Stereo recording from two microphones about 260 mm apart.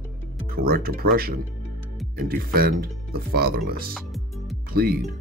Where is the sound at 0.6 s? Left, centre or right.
Right.